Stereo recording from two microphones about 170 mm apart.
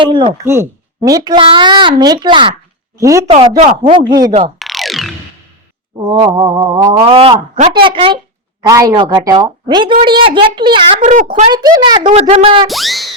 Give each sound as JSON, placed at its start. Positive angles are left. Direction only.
{"t": 0.0, "sound": "a child's voice", "side_deg": -30}
{"t": 0.4, "sound": "a child's voice", "side_deg": -15}
{"t": 3.0, "sound": "a child's voice", "side_deg": -20}
{"t": 3.2, "sound": "a child's voice", "side_deg": -30}
{"t": 4.6, "sound": "music", "side_deg": 0}
{"t": 6.1, "sound": "a child's voice", "side_deg": -25}
{"t": 6.7, "sound": "a child's voice", "side_deg": -40}
{"t": 8.6, "sound": "a child's voice", "side_deg": -20}
{"t": 11.0, "sound": "a woman's voice", "side_deg": -45}
{"t": 11.5, "sound": "a child's voice", "side_deg": -25}
{"t": 12.6, "sound": "music", "side_deg": 0}